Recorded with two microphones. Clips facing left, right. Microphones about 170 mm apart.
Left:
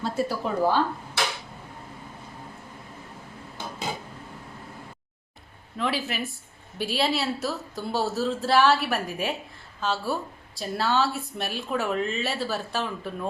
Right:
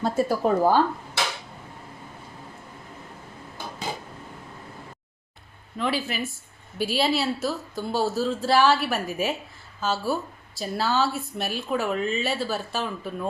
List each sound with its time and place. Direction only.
0.0 s speech: 45° right (ahead or behind)
5.7 s speech: centre (ahead or behind)